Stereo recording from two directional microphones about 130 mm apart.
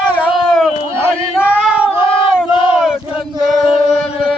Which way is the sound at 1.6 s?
10° right (ahead or behind).